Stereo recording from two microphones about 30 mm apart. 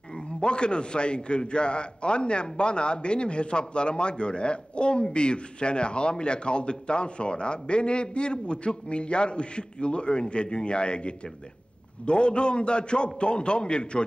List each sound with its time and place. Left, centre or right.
0.4 s a man's voice: left